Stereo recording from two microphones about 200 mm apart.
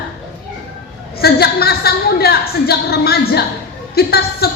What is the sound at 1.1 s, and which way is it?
A man's voice, 50° left (ahead or behind).